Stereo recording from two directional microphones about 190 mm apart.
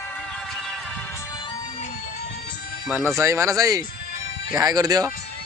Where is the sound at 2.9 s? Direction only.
10° right (ahead or behind).